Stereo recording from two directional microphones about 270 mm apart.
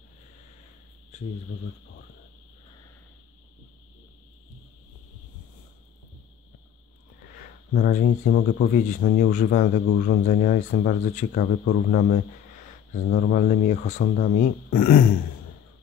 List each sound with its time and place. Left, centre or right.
1.1 s speech: left
7.7 s speech: left
8.3 s speech: left
8.7 s speech: left